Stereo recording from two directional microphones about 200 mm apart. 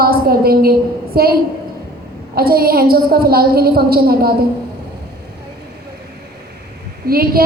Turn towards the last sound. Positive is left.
turn(degrees=-50)  # may be behind; listen again after turning